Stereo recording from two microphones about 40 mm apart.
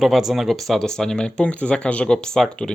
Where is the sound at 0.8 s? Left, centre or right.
Centre.